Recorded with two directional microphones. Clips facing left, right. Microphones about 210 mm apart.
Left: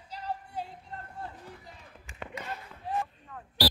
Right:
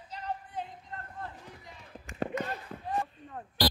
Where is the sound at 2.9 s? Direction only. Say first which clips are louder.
Even; 40° right (ahead or behind).